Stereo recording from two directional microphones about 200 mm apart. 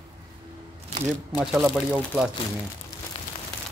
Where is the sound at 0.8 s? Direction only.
30° right (ahead or behind).